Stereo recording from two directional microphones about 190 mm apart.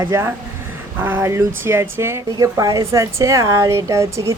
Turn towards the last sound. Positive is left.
turn(degrees=-15)  # may be behind; listen again after turning